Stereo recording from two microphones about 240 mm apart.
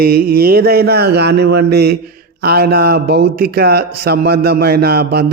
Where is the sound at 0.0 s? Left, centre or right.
Right.